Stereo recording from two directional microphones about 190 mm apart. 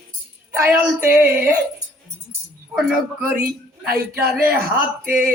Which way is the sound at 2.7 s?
5° right (ahead or behind).